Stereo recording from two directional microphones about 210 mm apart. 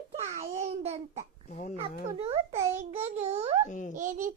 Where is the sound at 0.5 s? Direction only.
30° right (ahead or behind).